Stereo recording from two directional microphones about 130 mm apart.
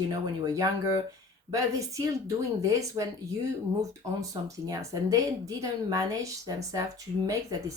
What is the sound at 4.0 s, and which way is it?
Speech, 25° right (ahead or behind).